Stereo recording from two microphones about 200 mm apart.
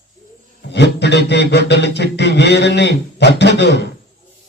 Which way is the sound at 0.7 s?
60° left (ahead or behind).